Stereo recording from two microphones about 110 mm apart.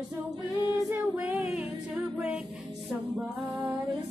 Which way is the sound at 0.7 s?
30° right (ahead or behind).